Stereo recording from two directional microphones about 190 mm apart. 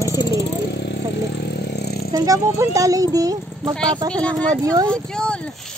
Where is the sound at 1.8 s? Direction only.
60° left (ahead or behind).